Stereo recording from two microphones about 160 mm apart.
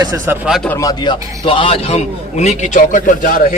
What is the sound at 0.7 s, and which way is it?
A man's voice, 20° left (ahead or behind).